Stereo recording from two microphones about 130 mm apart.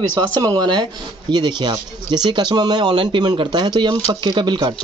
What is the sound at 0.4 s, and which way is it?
Speech, 30° right (ahead or behind).